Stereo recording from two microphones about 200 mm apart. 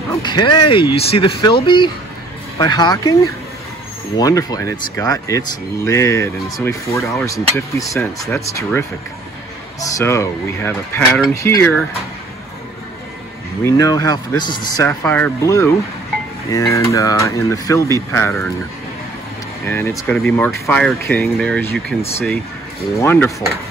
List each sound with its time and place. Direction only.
0.1 s speech: 20° left (ahead or behind)
4.2 s speech: 20° left (ahead or behind)
13.7 s speech: 15° left (ahead or behind)
19.7 s speech: 10° left (ahead or behind)
22.9 s speech: 10° left (ahead or behind)